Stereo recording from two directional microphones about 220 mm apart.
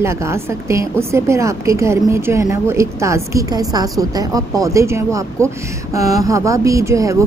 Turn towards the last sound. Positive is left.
turn(degrees=-15)  # may be behind; listen again after turning